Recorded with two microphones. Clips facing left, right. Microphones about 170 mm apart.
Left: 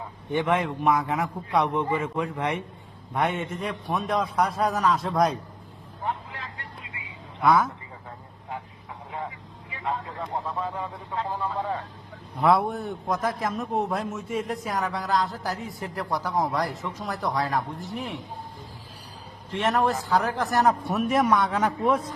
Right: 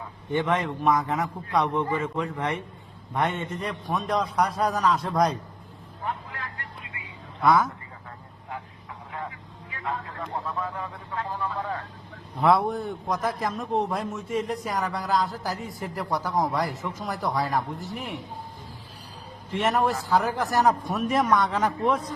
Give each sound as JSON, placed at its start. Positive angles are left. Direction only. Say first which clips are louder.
{"t": 0.3, "sound": "a man's voice", "louder": "left 1 dB", "side_deg": 10}
{"t": 6.1, "sound": "vehicle", "louder": "left 1 dB", "side_deg": 20}
{"t": 7.4, "sound": "a man's voice", "louder": "even", "side_deg": 5}
{"t": 9.1, "sound": "speech", "louder": "left 1 dB", "side_deg": 20}
{"t": 12.4, "sound": "a man's voice", "louder": "even", "side_deg": 0}
{"t": 19.5, "sound": "a man's voice", "louder": "even", "side_deg": -5}